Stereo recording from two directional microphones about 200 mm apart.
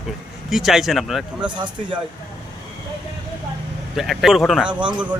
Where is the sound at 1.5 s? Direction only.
25° right (ahead or behind).